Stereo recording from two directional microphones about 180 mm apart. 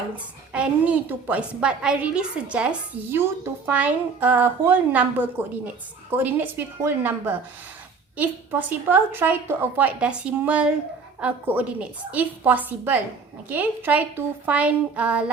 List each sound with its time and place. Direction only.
0.5 s a woman's voice: 5° right (ahead or behind)